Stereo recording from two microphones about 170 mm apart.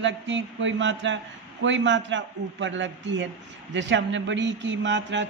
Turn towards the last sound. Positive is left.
turn(degrees=-90)